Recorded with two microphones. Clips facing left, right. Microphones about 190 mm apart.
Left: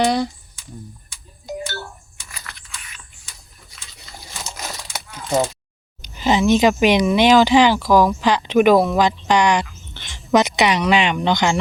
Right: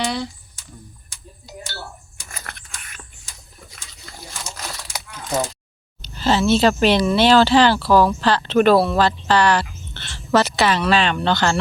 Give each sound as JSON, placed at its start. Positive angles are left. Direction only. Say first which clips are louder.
{"t": 0.0, "sound": "speech", "louder": "left 6 dB", "side_deg": 45}
{"t": 1.5, "sound": "music", "louder": "left 10 dB", "side_deg": 50}
{"t": 2.1, "sound": "a sound", "louder": "right 3 dB", "side_deg": -50}
{"t": 6.0, "sound": "speech", "louder": "left 1 dB", "side_deg": 15}